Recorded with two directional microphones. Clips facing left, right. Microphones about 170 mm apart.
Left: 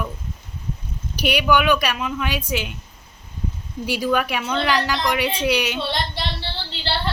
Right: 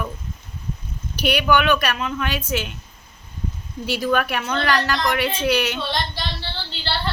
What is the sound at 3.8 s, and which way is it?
A woman's voice, 10° left (ahead or behind).